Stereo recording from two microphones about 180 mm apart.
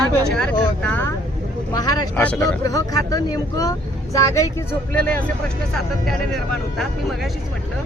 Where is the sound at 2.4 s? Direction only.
20° left (ahead or behind); by 7.2 s centre (ahead or behind).